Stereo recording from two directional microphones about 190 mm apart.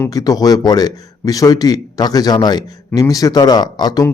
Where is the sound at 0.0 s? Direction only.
20° left (ahead or behind).